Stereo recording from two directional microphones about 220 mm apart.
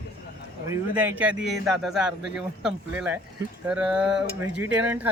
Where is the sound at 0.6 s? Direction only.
10° right (ahead or behind).